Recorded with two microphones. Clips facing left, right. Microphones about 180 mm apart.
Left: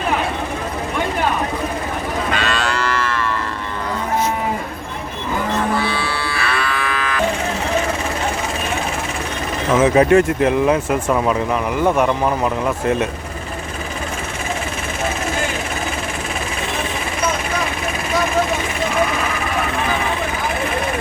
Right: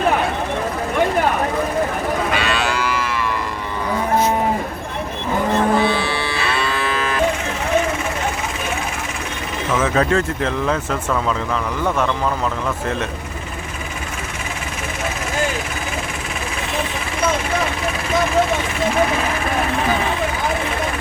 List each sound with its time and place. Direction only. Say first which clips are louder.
2.3 s livestock: even; 10° right (ahead or behind)
5.7 s cattle: right 3 dB; 20° right (ahead or behind)
9.8 s speech: left 6 dB; 15° left (ahead or behind)